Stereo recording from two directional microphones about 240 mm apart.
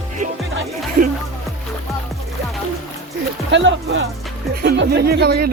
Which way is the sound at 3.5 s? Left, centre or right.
Right.